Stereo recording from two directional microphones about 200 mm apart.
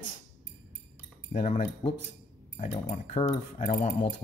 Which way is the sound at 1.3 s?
40° left (ahead or behind).